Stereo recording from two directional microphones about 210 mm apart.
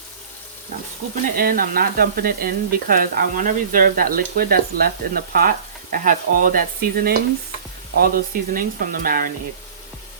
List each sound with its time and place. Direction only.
1.4 s speech: 45° right (ahead or behind)